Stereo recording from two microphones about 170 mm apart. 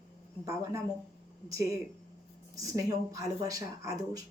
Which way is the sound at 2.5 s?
20° right (ahead or behind).